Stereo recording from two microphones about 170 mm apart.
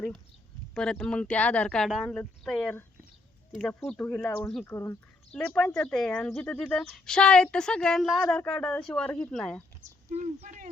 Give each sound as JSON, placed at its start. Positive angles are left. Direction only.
{"t": 0.7, "sound": "speech", "side_deg": 5}
{"t": 9.8, "sound": "speech", "side_deg": -40}